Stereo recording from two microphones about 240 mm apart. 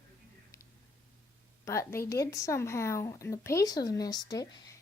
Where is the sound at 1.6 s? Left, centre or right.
Centre.